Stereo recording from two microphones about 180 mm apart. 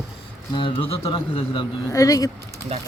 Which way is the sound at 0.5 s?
30° left (ahead or behind).